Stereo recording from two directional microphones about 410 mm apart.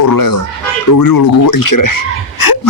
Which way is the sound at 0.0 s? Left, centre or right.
Left.